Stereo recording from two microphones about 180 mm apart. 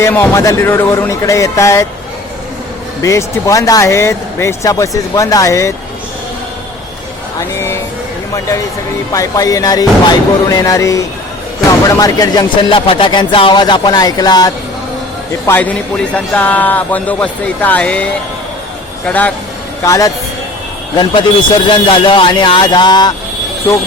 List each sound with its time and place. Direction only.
0.0 s speech: 15° left (ahead or behind)
3.0 s speech: 15° left (ahead or behind)
7.3 s speech: 15° left (ahead or behind)
15.4 s speech: 10° left (ahead or behind)
19.0 s speech: 10° left (ahead or behind); by 23.1 s 25° left (ahead or behind)